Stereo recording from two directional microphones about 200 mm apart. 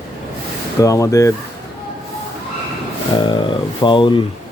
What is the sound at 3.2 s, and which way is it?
Speech, 25° left (ahead or behind).